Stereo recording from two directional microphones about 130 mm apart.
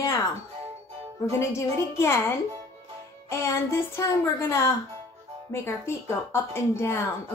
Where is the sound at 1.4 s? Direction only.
20° left (ahead or behind).